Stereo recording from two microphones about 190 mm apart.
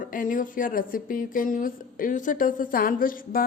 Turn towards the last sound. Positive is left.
turn(degrees=45)  # may be behind; listen again after turning